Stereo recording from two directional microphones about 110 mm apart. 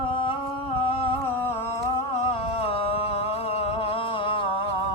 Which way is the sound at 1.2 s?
20° left (ahead or behind).